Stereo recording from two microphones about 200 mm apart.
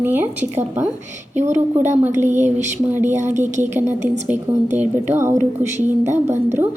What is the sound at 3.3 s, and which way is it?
Speech, 35° right (ahead or behind).